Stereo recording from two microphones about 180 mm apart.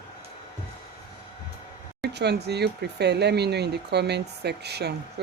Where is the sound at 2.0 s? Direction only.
65° right (ahead or behind).